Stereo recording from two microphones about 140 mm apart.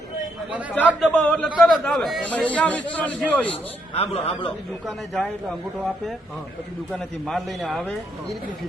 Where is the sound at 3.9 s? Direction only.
45° left (ahead or behind).